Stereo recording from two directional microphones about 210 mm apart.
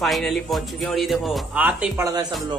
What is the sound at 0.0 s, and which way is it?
Speech, centre (ahead or behind).